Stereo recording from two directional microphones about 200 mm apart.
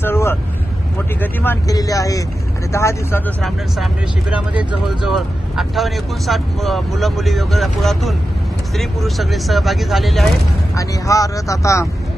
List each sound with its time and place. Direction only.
0.0 s vehicle: 10° left (ahead or behind)
1.2 s speech: 10° left (ahead or behind)
4.3 s speech: 5° right (ahead or behind)
10.8 s speech: 15° left (ahead or behind)